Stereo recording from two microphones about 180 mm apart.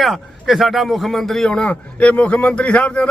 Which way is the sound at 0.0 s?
Centre (ahead or behind).